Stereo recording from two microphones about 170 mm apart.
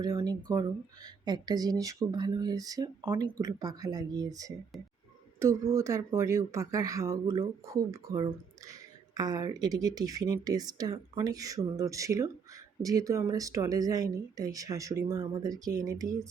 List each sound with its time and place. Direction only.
0.0 s speech: 20° right (ahead or behind)